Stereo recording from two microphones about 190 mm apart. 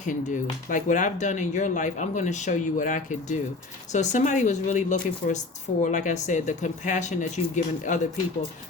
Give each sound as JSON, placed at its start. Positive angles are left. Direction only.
{"t": 0.0, "sound": "speech", "side_deg": 45}